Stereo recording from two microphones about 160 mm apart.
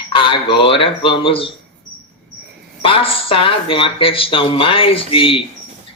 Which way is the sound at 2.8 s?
35° left (ahead or behind).